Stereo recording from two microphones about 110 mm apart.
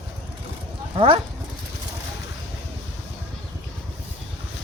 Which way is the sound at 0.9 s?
50° right (ahead or behind).